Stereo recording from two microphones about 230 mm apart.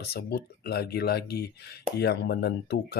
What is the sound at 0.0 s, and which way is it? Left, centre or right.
Speech, left.